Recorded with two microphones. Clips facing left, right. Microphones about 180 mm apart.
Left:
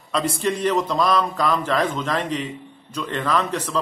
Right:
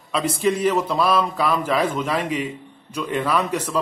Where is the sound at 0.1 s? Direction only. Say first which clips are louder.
Right 2 dB; 5° right (ahead or behind).